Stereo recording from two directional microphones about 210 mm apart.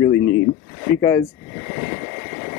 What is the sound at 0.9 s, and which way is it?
Speech, 10° left (ahead or behind).